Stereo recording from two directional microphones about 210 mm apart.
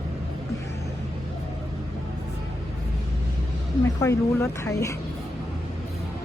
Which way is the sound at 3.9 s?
15° left (ahead or behind).